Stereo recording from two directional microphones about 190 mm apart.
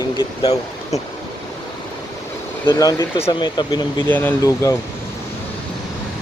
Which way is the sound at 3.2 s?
25° left (ahead or behind).